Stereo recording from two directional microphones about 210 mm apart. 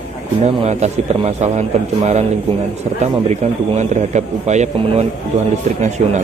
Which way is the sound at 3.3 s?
35° right (ahead or behind).